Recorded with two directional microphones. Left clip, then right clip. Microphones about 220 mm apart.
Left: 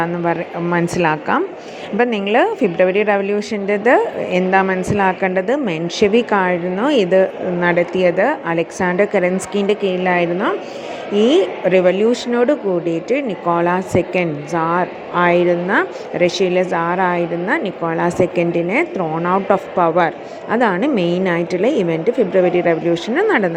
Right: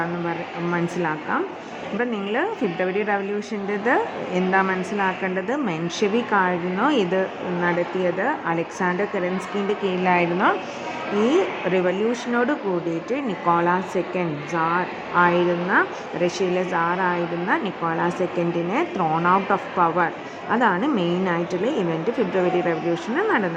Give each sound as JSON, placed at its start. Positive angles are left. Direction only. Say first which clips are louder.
{"t": 0.0, "sound": "a woman's voice", "louder": "left 7 dB", "side_deg": 25}
{"t": 9.8, "sound": "a woman's voice", "louder": "left 4 dB", "side_deg": 10}